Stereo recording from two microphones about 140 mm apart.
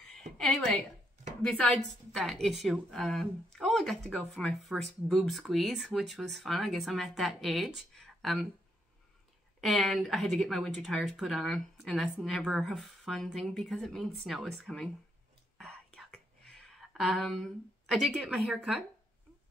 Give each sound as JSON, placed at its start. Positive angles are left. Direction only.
{"t": 0.4, "sound": "speech", "side_deg": 0}
{"t": 3.5, "sound": "a sound", "side_deg": 5}
{"t": 4.1, "sound": "speech", "side_deg": 5}
{"t": 9.6, "sound": "speech", "side_deg": 0}
{"t": 15.5, "sound": "whispering", "side_deg": 5}
{"t": 18.0, "sound": "speech", "side_deg": 0}